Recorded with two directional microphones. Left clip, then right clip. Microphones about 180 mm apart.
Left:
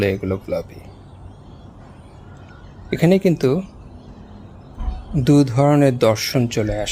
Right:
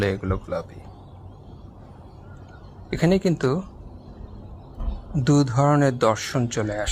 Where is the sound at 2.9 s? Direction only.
20° left (ahead or behind).